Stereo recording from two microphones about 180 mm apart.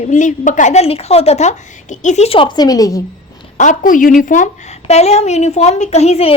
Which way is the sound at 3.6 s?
45° left (ahead or behind).